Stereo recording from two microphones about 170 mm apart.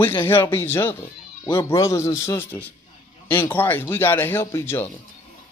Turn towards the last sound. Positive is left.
turn(degrees=15)  # may be behind; listen again after turning